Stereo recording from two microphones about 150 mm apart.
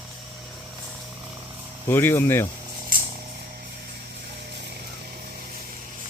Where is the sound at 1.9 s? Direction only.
15° left (ahead or behind).